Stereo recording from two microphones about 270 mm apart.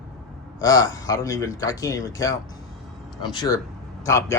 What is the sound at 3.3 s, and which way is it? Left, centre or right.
Speech, centre.